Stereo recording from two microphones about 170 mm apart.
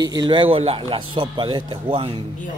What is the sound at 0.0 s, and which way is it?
Speech, 25° right (ahead or behind).